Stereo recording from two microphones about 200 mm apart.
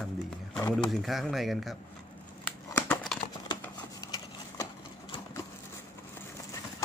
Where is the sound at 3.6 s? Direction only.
20° left (ahead or behind).